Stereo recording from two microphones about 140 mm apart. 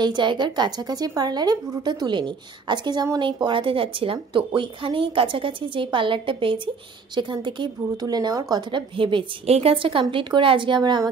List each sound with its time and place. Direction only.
0.0 s a woman's voice: 35° right (ahead or behind)